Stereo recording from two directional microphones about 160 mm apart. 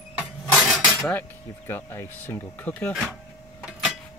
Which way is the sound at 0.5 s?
Centre (ahead or behind).